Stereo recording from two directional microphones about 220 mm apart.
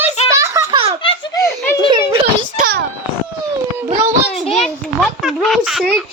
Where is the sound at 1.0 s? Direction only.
20° left (ahead or behind).